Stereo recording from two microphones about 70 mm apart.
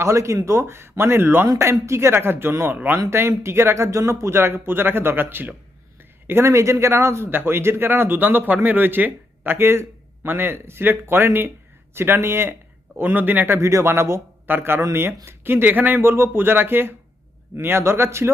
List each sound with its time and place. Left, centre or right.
0.0 s a man's voice: right
1.5 s a man's voice: right
13.6 s a man's voice: right